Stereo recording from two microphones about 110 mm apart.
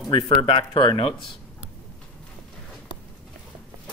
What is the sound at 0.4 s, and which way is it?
Speech, 50° left (ahead or behind).